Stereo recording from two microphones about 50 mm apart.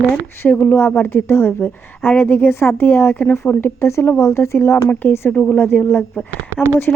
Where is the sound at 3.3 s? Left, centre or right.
Left.